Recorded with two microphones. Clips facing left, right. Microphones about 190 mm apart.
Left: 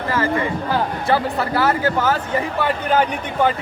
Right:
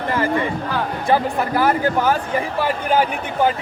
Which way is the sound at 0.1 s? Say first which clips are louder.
Even; 20° right (ahead or behind).